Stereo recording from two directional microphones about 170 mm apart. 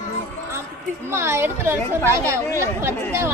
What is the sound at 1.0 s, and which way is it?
Speech, 15° right (ahead or behind).